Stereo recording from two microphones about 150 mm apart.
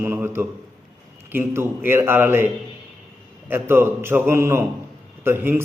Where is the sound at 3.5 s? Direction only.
15° right (ahead or behind).